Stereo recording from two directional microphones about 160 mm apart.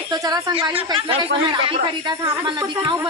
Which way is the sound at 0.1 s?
25° right (ahead or behind).